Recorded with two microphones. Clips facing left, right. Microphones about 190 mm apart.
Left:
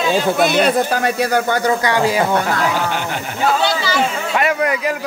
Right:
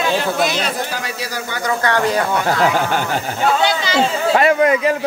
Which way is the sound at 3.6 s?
20° right (ahead or behind).